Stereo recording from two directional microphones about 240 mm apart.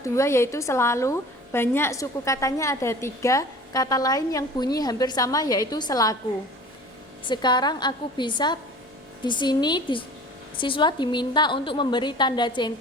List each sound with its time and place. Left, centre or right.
0.0 s a woman's voice: centre
7.3 s a woman's voice: centre